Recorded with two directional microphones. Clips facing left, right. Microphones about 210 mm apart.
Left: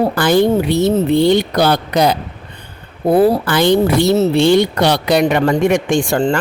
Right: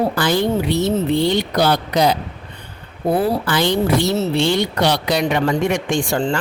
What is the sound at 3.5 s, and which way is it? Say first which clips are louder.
A woman's voice: left 4 dB; 55° left (ahead or behind).